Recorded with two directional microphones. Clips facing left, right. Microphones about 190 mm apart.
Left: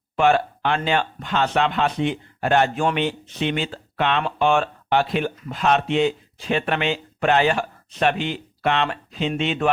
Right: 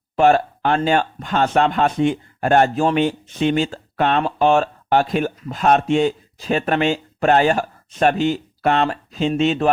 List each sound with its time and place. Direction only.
0.2 s speech: 45° right (ahead or behind)